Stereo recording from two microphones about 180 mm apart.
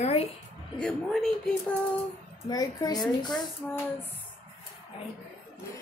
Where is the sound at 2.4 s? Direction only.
20° left (ahead or behind).